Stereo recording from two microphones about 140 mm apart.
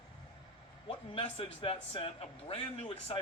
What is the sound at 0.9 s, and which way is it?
A man's voice, 40° left (ahead or behind).